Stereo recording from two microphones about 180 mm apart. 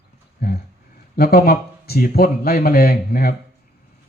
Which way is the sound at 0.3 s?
55° left (ahead or behind).